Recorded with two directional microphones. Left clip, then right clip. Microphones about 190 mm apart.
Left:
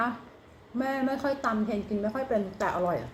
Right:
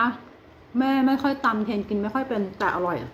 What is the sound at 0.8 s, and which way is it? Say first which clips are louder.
Speech: right 7 dB; 15° right (ahead or behind).